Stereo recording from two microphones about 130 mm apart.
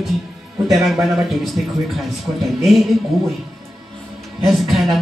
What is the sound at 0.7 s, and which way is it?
Speech, centre (ahead or behind).